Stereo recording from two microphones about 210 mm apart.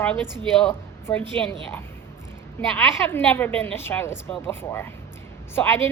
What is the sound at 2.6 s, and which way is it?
A woman's voice, 10° left (ahead or behind).